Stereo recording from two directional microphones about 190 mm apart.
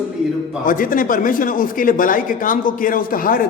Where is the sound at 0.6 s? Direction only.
45° left (ahead or behind).